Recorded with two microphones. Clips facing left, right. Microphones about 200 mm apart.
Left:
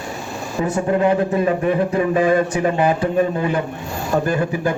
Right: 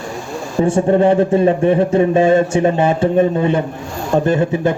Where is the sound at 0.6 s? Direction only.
30° right (ahead or behind).